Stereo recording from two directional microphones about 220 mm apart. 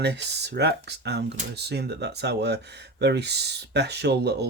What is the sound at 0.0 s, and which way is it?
Speech, 50° right (ahead or behind).